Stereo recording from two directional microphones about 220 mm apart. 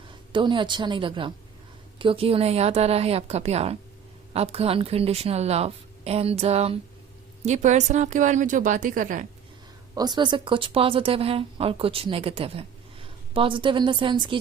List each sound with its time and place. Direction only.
0.3 s a woman's voice: 20° right (ahead or behind); by 9.2 s 35° right (ahead or behind)
9.9 s speech: 20° right (ahead or behind)